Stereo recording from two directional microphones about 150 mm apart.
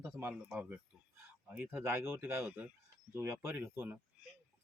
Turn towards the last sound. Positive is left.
turn(degrees=-10)  # may be behind; listen again after turning